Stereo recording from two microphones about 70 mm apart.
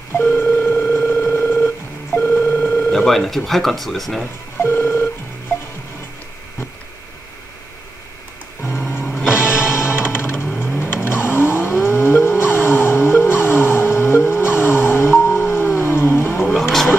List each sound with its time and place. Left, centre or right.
0.2 s dial tone: left
0.8 s a sound: left
2.1 s telephone dialing: left
3.1 s speech: centre
4.6 s telephone dialing: left
8.6 s music: left
10.8 s vehicle: left